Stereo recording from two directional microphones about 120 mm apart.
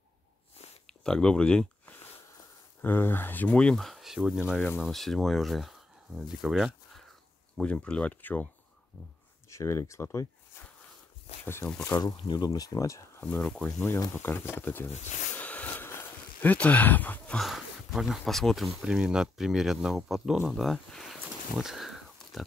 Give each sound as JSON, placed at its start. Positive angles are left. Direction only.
{"t": 0.8, "sound": "a sound", "side_deg": 5}
{"t": 2.8, "sound": "speech", "side_deg": 15}
{"t": 7.5, "sound": "speech", "side_deg": 10}
{"t": 9.5, "sound": "speech", "side_deg": 25}
{"t": 11.4, "sound": "speech", "side_deg": 20}
{"t": 12.0, "sound": "speech", "side_deg": 35}
{"t": 13.2, "sound": "speech", "side_deg": 10}
{"t": 13.8, "sound": "speech", "side_deg": 25}
{"t": 15.0, "sound": "speech", "side_deg": 90}
{"t": 15.3, "sound": "a sound", "side_deg": 15}
{"t": 17.4, "sound": "speech", "side_deg": 0}